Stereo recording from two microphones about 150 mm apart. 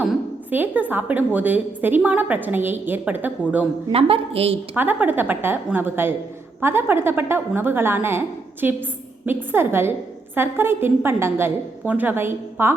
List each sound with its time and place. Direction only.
0.0 s a woman's voice: 10° right (ahead or behind)
3.9 s a woman's voice: 40° right (ahead or behind)
4.7 s a woman's voice: 10° right (ahead or behind)
9.2 s a woman's voice: 15° right (ahead or behind)